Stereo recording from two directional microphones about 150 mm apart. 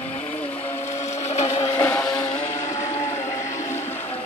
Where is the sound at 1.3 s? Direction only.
45° left (ahead or behind).